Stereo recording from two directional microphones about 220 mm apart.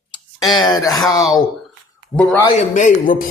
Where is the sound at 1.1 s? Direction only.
15° left (ahead or behind).